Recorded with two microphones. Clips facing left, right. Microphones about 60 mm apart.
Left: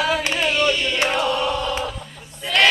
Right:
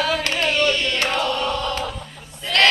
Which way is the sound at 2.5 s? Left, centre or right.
Centre.